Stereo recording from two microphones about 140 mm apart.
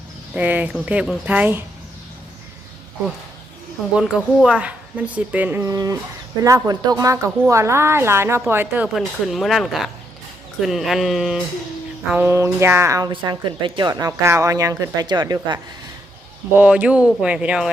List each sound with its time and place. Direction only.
0.3 s speech: 10° right (ahead or behind)
3.9 s speech: 5° right (ahead or behind)
5.6 s speech: 25° right (ahead or behind)
9.0 s speech: centre (ahead or behind)
12.1 s speech: 15° right (ahead or behind)
13.1 s speech: 35° right (ahead or behind)
16.6 s speech: 10° right (ahead or behind)